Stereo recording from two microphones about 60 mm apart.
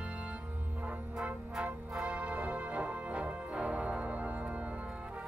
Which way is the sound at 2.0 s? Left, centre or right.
Right.